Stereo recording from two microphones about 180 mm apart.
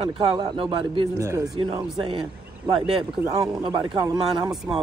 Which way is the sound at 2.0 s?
25° right (ahead or behind).